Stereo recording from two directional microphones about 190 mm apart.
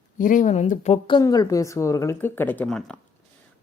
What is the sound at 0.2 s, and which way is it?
Speech, 45° left (ahead or behind).